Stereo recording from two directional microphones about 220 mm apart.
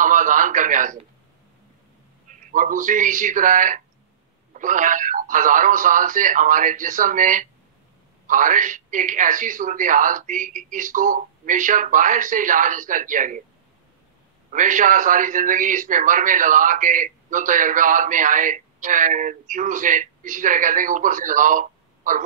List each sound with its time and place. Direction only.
0.0 s a man's voice: 35° right (ahead or behind)
2.2 s a man's voice: 35° right (ahead or behind)
14.5 s a man's voice: 35° right (ahead or behind)